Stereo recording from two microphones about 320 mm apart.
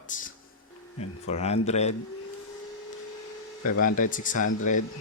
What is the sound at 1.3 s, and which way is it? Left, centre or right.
Speech, centre.